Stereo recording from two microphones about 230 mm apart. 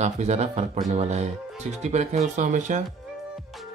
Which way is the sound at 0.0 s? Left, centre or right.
Right.